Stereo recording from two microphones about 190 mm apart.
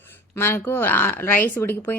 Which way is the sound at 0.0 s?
10° left (ahead or behind).